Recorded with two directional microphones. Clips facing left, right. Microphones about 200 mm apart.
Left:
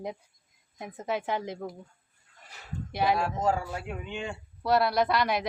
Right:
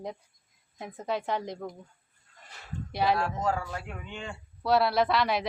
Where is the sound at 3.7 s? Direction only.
10° left (ahead or behind).